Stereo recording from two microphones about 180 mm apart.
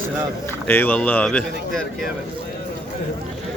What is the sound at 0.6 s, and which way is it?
Speech, 10° left (ahead or behind).